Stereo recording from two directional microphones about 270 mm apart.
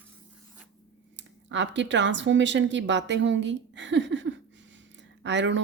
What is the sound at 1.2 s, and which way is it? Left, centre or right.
Speech, right.